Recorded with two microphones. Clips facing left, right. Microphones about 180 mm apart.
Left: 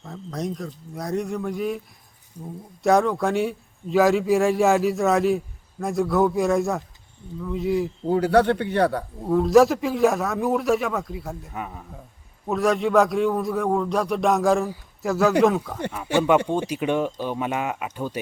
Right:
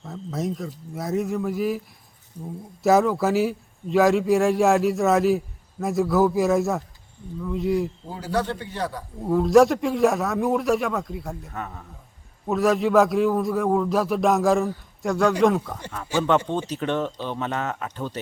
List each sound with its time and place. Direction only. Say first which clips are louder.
0.0 s a man's voice: right 1 dB; 5° right (ahead or behind)
8.0 s a man's voice: left 8 dB; 60° left (ahead or behind)
9.2 s a man's voice: even; centre (ahead or behind)
12.5 s a man's voice: right 1 dB; centre (ahead or behind)
16.1 s a man's voice: left 3 dB; 65° left (ahead or behind)
16.5 s speech: left 2 dB; 10° left (ahead or behind)